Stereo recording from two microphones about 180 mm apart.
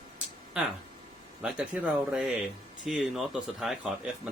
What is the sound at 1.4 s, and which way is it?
Speech, 5° right (ahead or behind).